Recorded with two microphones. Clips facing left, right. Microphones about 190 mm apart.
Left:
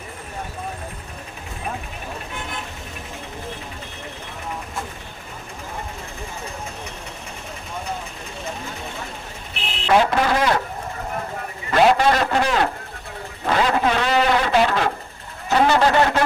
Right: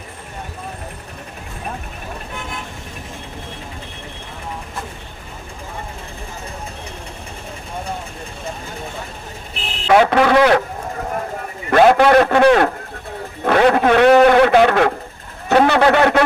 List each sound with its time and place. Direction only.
9.9 s speech: 65° right (ahead or behind)
11.7 s a man's voice: 55° right (ahead or behind)